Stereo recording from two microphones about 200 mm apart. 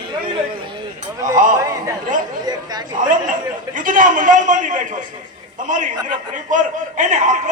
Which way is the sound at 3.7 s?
40° right (ahead or behind).